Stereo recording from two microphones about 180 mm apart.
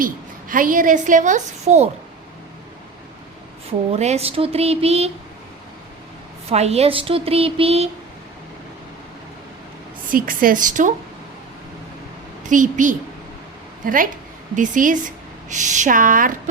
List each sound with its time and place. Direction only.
0.0 s a woman's voice: 50° right (ahead or behind)
3.7 s speech: 35° right (ahead or behind)
6.5 s speech: 35° right (ahead or behind)
10.1 s a woman's voice: 50° right (ahead or behind)
12.4 s a woman's voice: 45° right (ahead or behind)